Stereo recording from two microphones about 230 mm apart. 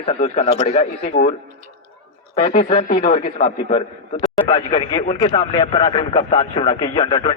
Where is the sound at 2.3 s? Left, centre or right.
Left.